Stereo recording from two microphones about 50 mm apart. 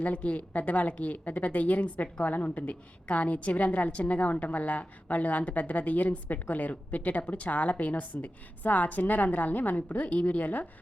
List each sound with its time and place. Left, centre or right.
0.0 s a woman's voice: left